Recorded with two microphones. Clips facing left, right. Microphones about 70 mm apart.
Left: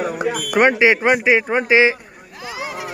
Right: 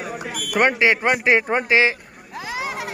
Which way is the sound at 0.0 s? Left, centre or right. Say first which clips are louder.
Left 8 dB; left.